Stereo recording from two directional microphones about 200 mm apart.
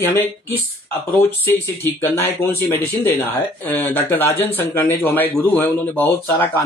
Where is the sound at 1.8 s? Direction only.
10° left (ahead or behind).